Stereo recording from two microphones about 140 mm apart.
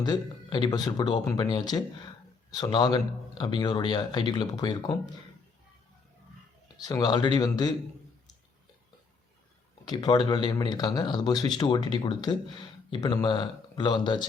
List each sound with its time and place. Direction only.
0.0 s a man's voice: 30° left (ahead or behind)
6.7 s speech: 25° left (ahead or behind)
9.8 s a man's voice: 30° left (ahead or behind)